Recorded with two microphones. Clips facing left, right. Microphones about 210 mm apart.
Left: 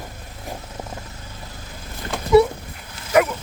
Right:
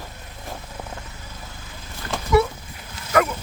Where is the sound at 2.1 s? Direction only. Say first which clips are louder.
Left 5 dB; 20° left (ahead or behind).